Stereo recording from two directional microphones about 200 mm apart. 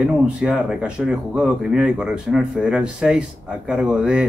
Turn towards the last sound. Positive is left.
turn(degrees=-5)  # may be behind; listen again after turning